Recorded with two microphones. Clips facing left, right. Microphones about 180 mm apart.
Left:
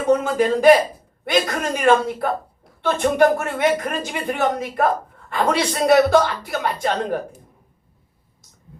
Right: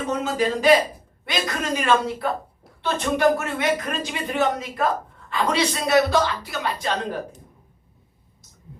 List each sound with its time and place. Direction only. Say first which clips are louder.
0.3 s speech: left 3 dB; 50° left (ahead or behind)